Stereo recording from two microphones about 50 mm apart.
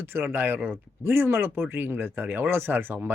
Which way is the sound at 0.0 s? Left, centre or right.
Right.